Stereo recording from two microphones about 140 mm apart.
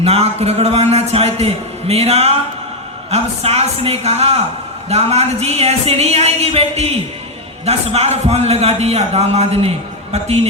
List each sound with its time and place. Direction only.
0.0 s a man's voice: 45° right (ahead or behind)